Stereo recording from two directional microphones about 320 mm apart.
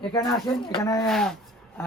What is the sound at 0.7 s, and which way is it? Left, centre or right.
Speech, centre.